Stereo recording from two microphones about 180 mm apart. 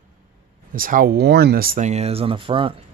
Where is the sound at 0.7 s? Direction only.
50° right (ahead or behind).